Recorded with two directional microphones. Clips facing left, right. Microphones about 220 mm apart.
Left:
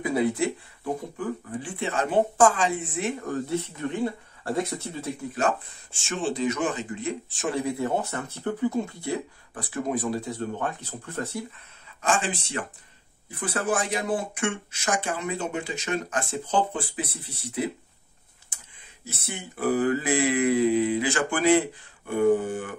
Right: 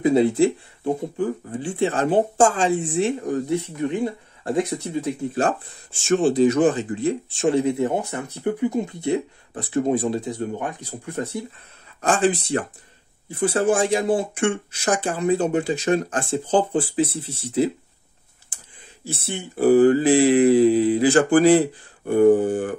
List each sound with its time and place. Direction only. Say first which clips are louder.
0.0 s speech: right 8 dB; 25° right (ahead or behind)
3.3 s speech: right 5 dB; 15° right (ahead or behind)
5.3 s speech: even; 35° right (ahead or behind); by 11.4 s 15° right (ahead or behind)
12.0 s speech: right 7 dB; 35° right (ahead or behind)
19.0 s speech: right 7 dB; 30° right (ahead or behind)